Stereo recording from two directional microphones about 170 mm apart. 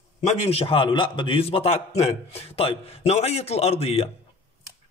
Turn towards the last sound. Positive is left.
turn(degrees=35)  # may be behind; listen again after turning